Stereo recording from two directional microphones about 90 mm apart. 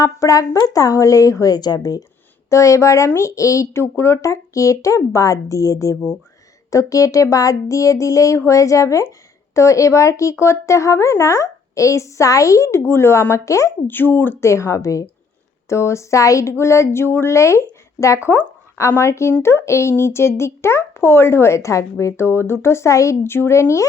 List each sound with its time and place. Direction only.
0.0 s a woman's voice: 40° left (ahead or behind)
2.5 s a woman's voice: 35° left (ahead or behind)
13.8 s speech: 20° left (ahead or behind)
14.4 s a woman's voice: 35° left (ahead or behind)